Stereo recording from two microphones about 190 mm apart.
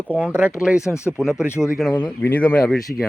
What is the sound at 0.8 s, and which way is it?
Speech, 15° left (ahead or behind).